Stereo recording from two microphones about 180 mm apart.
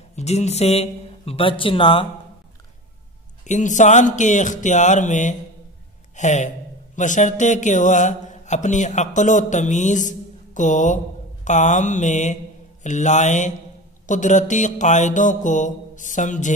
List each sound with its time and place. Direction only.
0.1 s a man's voice: 40° left (ahead or behind)
3.4 s speech: 45° left (ahead or behind)